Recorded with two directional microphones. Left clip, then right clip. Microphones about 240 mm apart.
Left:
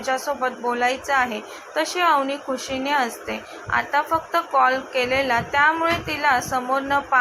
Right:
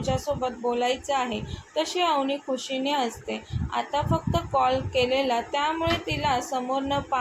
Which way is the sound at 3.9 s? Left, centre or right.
Centre.